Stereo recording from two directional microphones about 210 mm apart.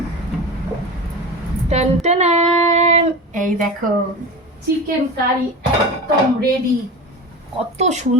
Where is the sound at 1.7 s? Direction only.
30° right (ahead or behind).